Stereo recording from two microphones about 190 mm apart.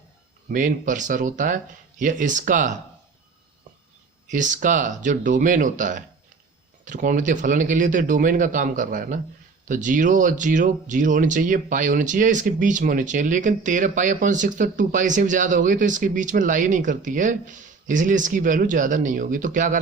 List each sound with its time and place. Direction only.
0.5 s speech: 45° right (ahead or behind)
4.3 s speech: 40° right (ahead or behind)